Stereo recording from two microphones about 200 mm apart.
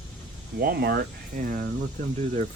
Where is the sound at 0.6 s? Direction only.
50° right (ahead or behind).